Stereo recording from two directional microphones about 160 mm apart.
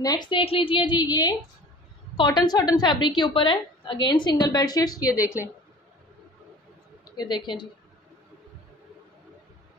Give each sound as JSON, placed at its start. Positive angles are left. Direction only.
{"t": 0.0, "sound": "a woman's voice", "side_deg": 25}
{"t": 7.2, "sound": "a woman's voice", "side_deg": 30}